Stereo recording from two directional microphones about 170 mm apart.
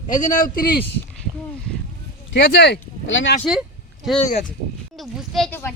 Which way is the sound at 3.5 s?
5° right (ahead or behind).